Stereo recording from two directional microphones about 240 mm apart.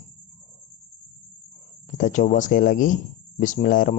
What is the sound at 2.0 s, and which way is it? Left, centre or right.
Speech, left.